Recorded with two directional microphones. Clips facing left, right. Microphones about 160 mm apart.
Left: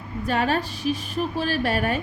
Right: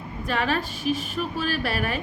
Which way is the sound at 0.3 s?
40° left (ahead or behind).